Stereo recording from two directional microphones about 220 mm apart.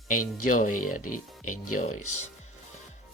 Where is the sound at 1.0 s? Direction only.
90° left.